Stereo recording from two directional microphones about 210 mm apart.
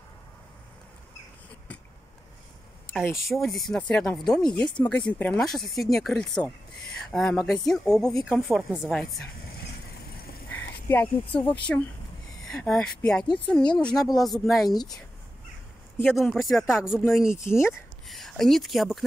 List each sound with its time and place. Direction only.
3.3 s speech: centre (ahead or behind)
10.5 s a sound: 5° left (ahead or behind)
11.7 s speech: 5° left (ahead or behind)
14.7 s speech: 20° left (ahead or behind)
16.0 s speech: centre (ahead or behind)
17.5 s speech: 10° left (ahead or behind)
18.0 s speech: centre (ahead or behind)